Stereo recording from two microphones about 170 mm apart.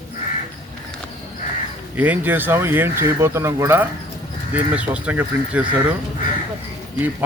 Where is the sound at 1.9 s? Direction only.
10° right (ahead or behind).